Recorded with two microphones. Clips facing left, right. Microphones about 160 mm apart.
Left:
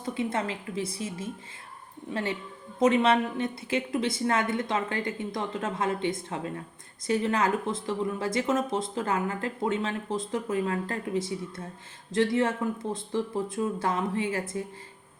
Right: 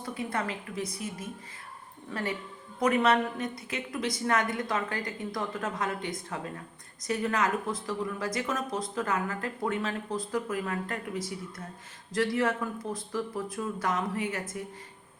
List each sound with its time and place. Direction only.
0.0 s speech: 25° left (ahead or behind)
2.1 s a woman's voice: 15° left (ahead or behind)